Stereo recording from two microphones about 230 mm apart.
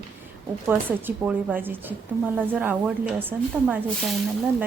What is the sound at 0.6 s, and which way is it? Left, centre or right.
A woman's voice, centre.